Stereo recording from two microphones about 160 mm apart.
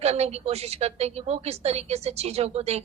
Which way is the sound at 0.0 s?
40° right (ahead or behind).